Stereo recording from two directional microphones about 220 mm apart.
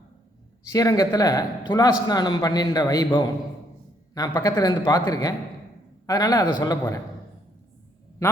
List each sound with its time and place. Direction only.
0.7 s a man's voice: 15° left (ahead or behind)